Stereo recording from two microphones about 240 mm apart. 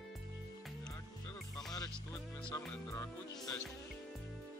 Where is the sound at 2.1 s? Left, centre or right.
Centre.